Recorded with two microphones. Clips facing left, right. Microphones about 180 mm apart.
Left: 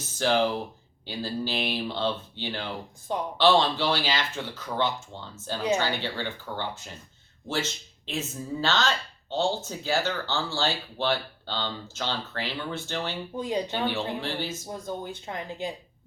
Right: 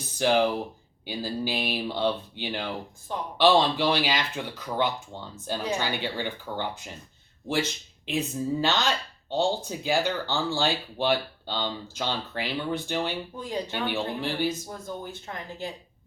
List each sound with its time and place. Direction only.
0.2 s speech: 10° right (ahead or behind)
8.0 s speech: 15° right (ahead or behind)
13.3 s speech: 15° left (ahead or behind)
13.8 s speech: 15° right (ahead or behind)
14.7 s speech: 20° left (ahead or behind)